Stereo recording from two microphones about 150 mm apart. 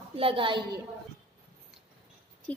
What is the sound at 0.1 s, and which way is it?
Speech, 40° right (ahead or behind).